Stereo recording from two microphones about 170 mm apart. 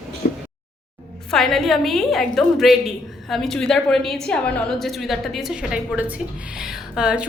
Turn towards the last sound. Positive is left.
turn(degrees=-5)  # may be behind; listen again after turning